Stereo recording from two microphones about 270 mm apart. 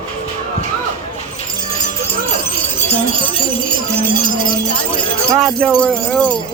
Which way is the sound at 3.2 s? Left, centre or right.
Centre.